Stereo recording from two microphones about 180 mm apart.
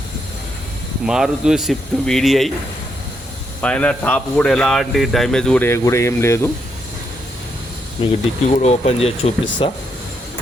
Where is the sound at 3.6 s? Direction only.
10° left (ahead or behind).